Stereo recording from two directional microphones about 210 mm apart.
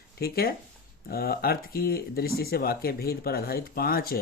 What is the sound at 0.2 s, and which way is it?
Speech, 45° left (ahead or behind).